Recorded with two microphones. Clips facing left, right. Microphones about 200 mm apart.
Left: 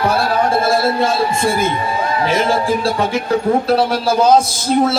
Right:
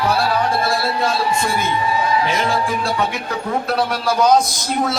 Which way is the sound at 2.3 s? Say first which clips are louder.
Left 4 dB; 25° left (ahead or behind).